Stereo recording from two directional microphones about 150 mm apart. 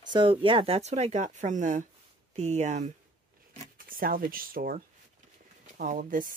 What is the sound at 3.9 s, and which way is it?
Speech, 70° right (ahead or behind).